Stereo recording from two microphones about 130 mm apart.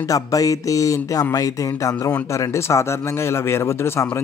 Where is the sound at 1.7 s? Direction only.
15° left (ahead or behind).